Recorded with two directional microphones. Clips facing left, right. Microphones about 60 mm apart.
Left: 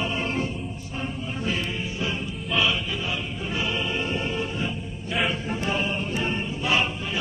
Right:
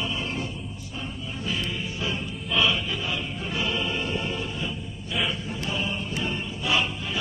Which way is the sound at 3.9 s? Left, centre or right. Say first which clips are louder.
Left 1 dB; left.